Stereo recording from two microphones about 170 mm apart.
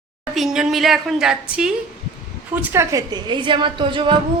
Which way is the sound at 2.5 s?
15° right (ahead or behind).